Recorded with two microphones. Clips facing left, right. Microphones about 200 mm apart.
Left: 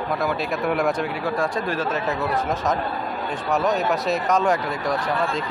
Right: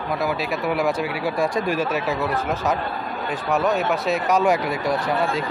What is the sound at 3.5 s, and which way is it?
Speech, centre (ahead or behind).